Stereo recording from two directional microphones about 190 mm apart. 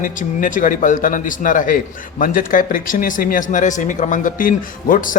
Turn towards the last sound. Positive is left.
turn(degrees=45)  # may be behind; listen again after turning